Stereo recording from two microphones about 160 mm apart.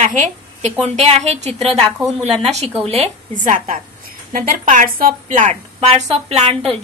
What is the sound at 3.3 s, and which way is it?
A woman's voice, 55° right (ahead or behind).